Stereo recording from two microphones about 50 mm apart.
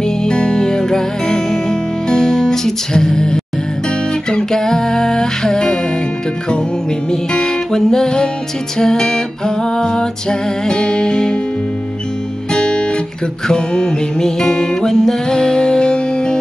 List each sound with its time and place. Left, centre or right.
0.0 s music: centre
7.1 s music: centre
12.5 s guitar: centre
13.5 s music: centre